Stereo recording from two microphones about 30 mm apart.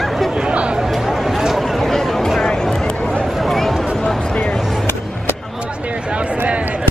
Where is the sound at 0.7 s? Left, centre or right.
Centre.